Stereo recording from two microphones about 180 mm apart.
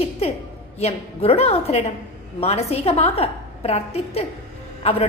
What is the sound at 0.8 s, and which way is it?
A woman's voice, 35° left (ahead or behind).